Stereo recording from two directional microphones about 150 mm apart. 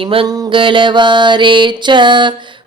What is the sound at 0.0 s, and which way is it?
Mantra, 35° right (ahead or behind).